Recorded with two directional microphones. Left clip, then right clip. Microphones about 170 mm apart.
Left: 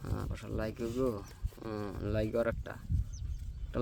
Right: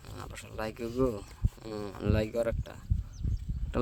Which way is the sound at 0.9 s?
45° right (ahead or behind).